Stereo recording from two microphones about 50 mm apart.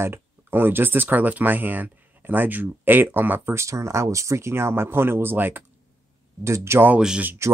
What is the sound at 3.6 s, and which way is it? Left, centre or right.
Speech, right.